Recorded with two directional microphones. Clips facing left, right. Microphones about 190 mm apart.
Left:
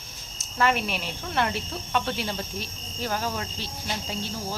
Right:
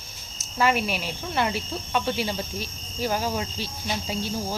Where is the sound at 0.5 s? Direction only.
5° right (ahead or behind).